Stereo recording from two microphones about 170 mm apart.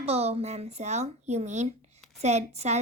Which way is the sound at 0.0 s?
40° right (ahead or behind).